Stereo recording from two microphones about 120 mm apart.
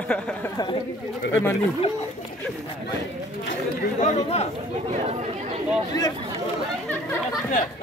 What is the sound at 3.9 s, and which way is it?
Speech, 75° left (ahead or behind).